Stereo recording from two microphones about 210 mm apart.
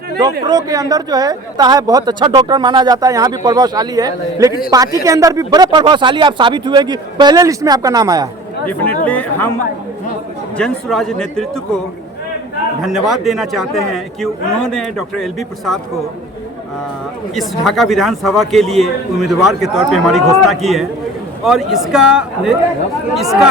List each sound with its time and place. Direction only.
0.4 s speech: 20° right (ahead or behind)
9.0 s speech: 5° left (ahead or behind)
10.6 s a man's voice: 5° left (ahead or behind)
12.8 s a man's voice: centre (ahead or behind)
17.3 s a man's voice: centre (ahead or behind)